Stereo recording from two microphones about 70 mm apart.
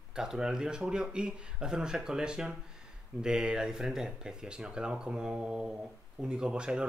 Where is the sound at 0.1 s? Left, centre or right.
Centre.